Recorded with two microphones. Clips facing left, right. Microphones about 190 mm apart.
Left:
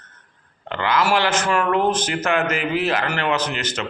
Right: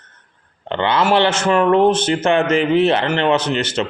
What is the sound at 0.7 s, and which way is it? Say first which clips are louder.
Speech: right 4 dB; 25° right (ahead or behind).